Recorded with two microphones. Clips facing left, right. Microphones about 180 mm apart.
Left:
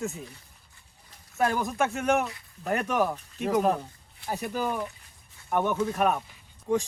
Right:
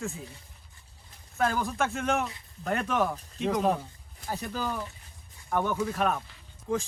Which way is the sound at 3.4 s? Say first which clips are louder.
Left 2 dB; 5° left (ahead or behind).